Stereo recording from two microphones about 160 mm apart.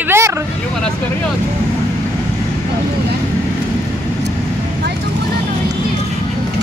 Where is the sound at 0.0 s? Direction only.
15° right (ahead or behind).